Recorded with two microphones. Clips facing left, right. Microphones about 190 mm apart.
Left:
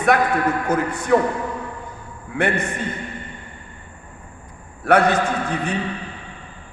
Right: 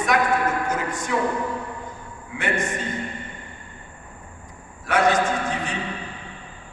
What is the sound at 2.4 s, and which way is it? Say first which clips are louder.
Speech: left 4 dB; 60° left (ahead or behind).